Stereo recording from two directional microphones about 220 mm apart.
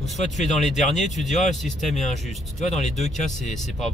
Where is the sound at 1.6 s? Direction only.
Centre (ahead or behind).